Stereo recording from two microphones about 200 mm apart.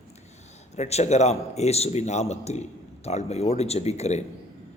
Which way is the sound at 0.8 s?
35° left (ahead or behind).